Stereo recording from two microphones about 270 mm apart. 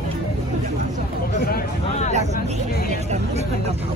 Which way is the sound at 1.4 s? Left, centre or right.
Left.